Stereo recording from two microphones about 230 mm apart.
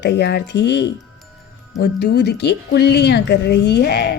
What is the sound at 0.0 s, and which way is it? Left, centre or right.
Speech, left.